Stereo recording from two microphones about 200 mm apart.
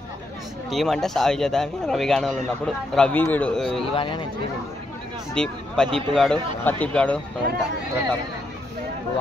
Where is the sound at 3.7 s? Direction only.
25° left (ahead or behind).